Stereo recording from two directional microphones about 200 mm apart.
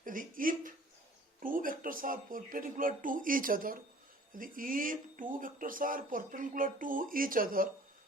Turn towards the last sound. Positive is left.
turn(degrees=-45)  # may be behind; listen again after turning